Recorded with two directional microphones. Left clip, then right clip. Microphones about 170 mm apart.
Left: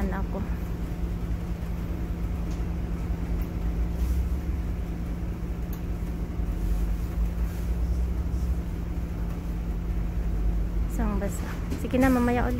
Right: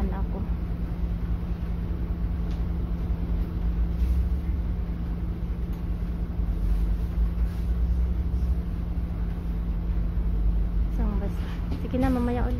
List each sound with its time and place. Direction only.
11.9 s a woman's voice: 5° left (ahead or behind)